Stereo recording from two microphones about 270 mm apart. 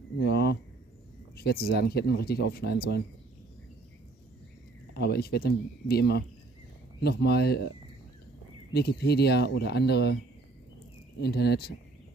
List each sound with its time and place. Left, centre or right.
0.2 s speech: left
1.3 s a sound: left
1.7 s speech: left
4.9 s speech: left
8.7 s speech: left
11.1 s speech: left